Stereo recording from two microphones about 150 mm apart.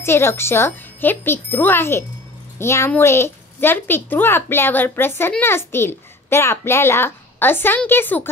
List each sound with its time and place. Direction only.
0.0 s a child's voice: 15° left (ahead or behind)